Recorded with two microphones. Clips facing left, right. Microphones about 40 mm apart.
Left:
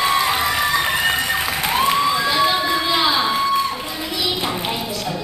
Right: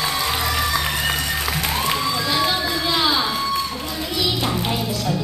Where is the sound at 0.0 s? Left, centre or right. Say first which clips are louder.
Left 5 dB; centre.